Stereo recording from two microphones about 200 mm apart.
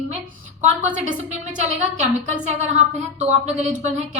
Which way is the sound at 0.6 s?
40° right (ahead or behind).